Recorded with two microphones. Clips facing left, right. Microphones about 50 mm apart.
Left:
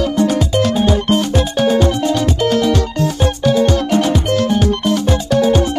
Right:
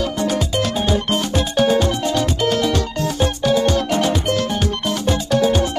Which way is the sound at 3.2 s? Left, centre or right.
Centre.